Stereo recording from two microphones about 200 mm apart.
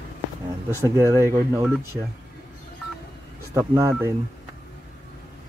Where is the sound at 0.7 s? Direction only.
15° right (ahead or behind).